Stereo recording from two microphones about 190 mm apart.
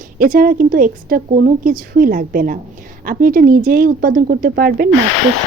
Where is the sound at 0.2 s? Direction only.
50° right (ahead or behind).